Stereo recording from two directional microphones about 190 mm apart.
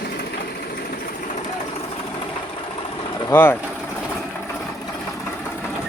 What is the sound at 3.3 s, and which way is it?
Speech, 10° left (ahead or behind).